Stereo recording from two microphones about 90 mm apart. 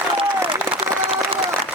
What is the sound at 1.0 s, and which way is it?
Applause, 90° right.